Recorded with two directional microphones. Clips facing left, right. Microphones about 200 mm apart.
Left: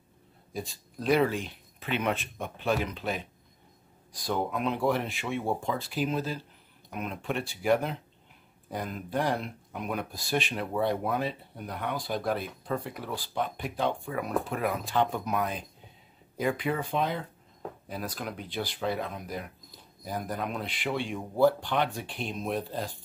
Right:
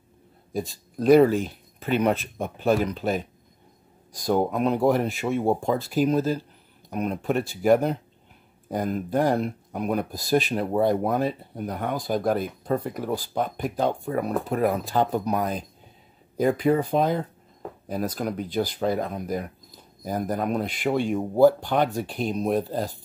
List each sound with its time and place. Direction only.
0.5 s speech: 45° right (ahead or behind)